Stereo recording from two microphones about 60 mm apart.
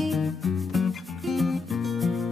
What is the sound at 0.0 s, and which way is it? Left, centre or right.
Music, centre.